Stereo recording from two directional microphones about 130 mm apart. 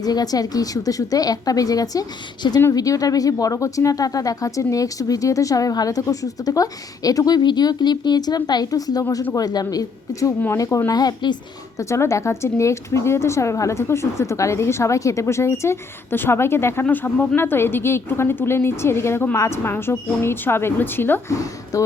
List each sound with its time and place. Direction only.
0.0 s speech: 30° left (ahead or behind)
11.8 s a woman's voice: 20° left (ahead or behind)